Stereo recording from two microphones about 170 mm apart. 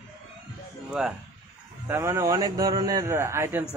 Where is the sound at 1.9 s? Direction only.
15° right (ahead or behind).